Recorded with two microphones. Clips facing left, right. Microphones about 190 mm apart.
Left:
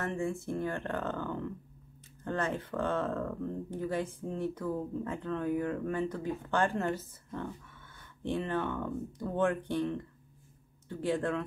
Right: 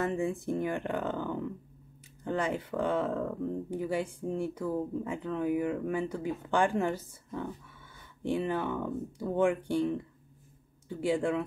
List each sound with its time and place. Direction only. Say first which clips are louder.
0.0 s speech: right 3 dB; 15° right (ahead or behind)